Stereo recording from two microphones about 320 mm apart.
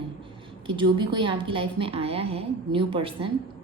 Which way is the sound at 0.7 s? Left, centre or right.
Centre.